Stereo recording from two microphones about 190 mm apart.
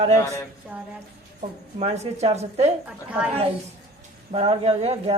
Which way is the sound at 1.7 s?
35° right (ahead or behind).